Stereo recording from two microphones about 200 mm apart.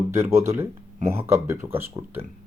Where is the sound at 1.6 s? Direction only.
10° right (ahead or behind).